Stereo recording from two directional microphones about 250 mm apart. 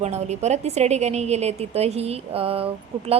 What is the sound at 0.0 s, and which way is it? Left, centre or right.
A woman's voice, right.